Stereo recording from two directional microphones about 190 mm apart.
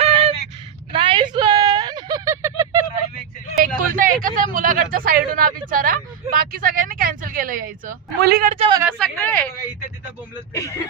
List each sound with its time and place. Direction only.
0.0 s a sound: 30° right (ahead or behind); by 2.8 s 15° right (ahead or behind)
3.6 s speech: 50° right (ahead or behind)
8.4 s a man's voice: 30° right (ahead or behind)
9.0 s speech: 10° left (ahead or behind)
10.5 s speech: 15° left (ahead or behind)